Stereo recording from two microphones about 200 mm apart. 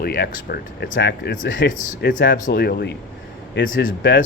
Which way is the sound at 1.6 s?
45° left (ahead or behind).